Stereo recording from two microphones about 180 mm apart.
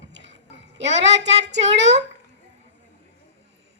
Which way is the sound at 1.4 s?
75° right (ahead or behind).